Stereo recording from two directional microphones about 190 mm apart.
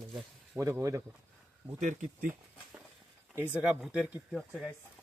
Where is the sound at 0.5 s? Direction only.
15° right (ahead or behind).